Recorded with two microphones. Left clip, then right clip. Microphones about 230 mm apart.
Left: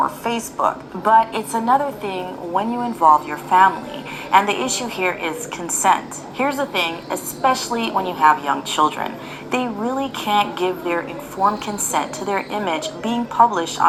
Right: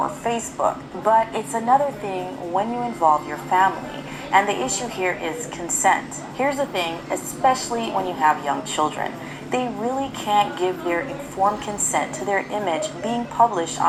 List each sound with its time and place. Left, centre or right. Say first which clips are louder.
0.0 s a woman's voice: left 3 dB; left